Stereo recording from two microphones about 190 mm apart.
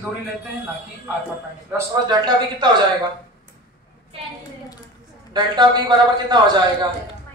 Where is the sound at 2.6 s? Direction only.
25° right (ahead or behind).